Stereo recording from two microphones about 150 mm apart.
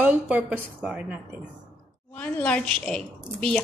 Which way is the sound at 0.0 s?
10° right (ahead or behind).